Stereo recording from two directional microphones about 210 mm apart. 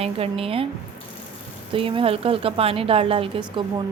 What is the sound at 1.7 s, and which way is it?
A woman's voice, 25° right (ahead or behind).